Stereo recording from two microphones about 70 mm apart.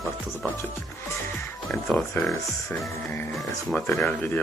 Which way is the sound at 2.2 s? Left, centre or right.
Left.